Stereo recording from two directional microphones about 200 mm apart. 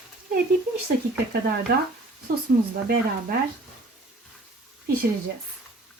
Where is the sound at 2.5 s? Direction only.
55° right (ahead or behind).